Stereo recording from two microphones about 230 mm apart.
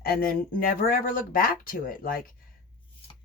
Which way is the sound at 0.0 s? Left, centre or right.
Left.